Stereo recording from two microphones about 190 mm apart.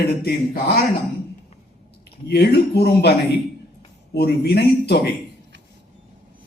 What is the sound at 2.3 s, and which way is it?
Speech, 60° left (ahead or behind).